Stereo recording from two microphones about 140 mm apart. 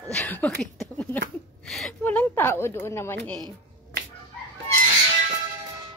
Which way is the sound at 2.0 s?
15° left (ahead or behind).